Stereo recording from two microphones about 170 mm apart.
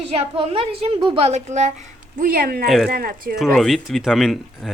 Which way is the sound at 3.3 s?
Centre (ahead or behind).